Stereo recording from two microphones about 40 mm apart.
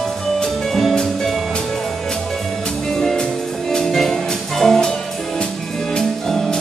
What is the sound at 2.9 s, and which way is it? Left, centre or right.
Music, centre.